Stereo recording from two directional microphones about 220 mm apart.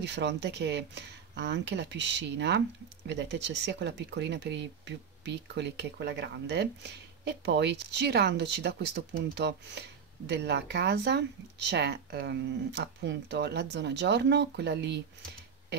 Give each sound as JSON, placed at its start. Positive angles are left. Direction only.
{"t": 0.0, "sound": "speech", "side_deg": -50}